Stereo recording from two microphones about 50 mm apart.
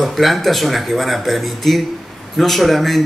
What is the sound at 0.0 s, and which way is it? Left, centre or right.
Speech, centre.